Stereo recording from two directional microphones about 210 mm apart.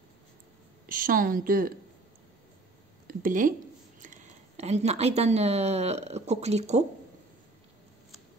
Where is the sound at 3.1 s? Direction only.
40° right (ahead or behind).